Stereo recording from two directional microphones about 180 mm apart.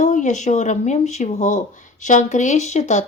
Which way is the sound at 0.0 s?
45° left (ahead or behind).